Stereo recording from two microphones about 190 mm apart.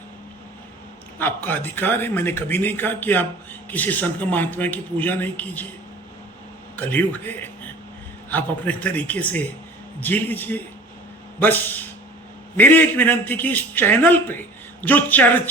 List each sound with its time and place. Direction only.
1.2 s a man's voice: 10° left (ahead or behind)
6.7 s a man's voice: 10° left (ahead or behind)